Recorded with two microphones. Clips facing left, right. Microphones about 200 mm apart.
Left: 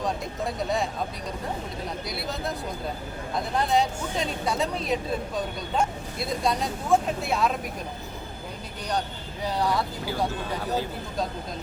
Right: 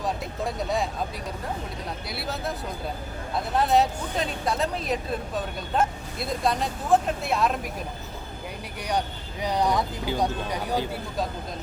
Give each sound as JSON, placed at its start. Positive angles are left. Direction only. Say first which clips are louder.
{"t": 0.0, "sound": "speech", "louder": "even", "side_deg": 0}
{"t": 2.0, "sound": "speech", "louder": "right 2 dB", "side_deg": 0}
{"t": 3.5, "sound": "speech", "louder": "right 3 dB", "side_deg": -5}
{"t": 9.4, "sound": "speech", "louder": "right 2 dB", "side_deg": -15}